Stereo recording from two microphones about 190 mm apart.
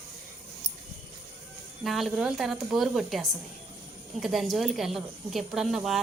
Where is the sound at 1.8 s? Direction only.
Centre (ahead or behind).